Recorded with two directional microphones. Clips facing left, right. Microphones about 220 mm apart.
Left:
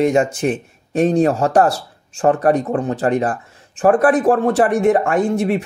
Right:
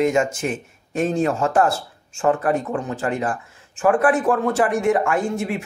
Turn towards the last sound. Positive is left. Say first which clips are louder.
# left 6 dB
turn(degrees=35)  # may be behind; listen again after turning